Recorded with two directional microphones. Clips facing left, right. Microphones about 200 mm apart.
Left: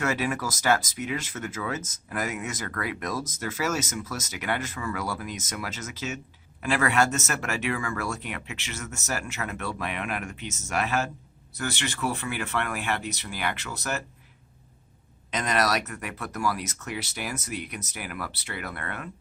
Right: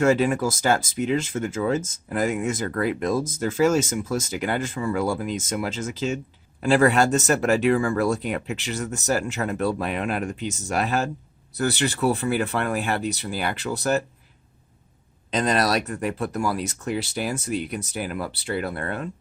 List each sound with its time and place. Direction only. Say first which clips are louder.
0.0 s speech: right 8 dB; 30° right (ahead or behind)
15.3 s speech: right 4 dB; 30° right (ahead or behind)